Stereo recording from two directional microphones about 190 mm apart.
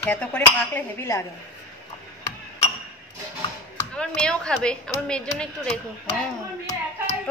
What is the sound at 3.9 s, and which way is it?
Speech, 5° left (ahead or behind).